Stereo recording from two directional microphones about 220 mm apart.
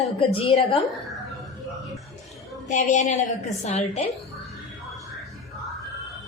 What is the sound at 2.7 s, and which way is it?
A woman's voice, 35° left (ahead or behind).